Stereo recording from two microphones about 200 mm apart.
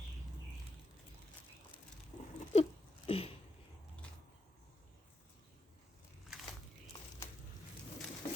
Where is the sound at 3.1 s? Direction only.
30° left (ahead or behind).